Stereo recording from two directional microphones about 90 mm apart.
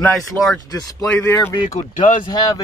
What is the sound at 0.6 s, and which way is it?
Speech, 45° left (ahead or behind).